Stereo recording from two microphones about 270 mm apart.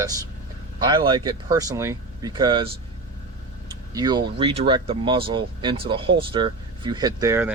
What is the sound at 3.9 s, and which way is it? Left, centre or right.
Speech, centre.